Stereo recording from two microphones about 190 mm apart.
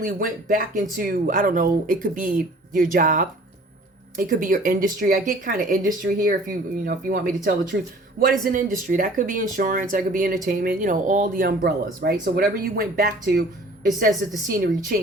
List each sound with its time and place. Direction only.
0.0 s speech: 45° right (ahead or behind)
14.5 s speech: 45° right (ahead or behind)